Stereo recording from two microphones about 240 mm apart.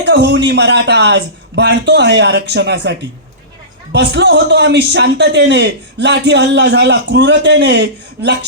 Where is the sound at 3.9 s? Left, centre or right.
Right.